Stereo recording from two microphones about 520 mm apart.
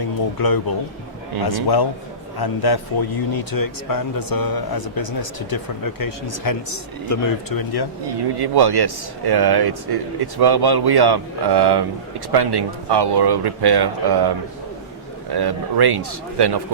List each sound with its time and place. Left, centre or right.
0.3 s a man's voice: left
8.0 s speech: right